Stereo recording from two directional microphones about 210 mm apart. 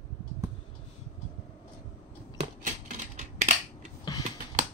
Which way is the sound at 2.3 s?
35° right (ahead or behind).